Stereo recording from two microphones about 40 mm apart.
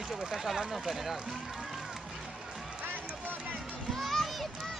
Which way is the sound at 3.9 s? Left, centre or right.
Centre.